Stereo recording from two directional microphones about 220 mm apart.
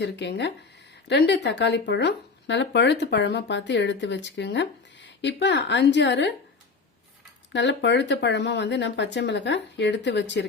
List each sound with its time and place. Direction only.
0.0 s speech: 50° left (ahead or behind)
7.5 s speech: 55° left (ahead or behind)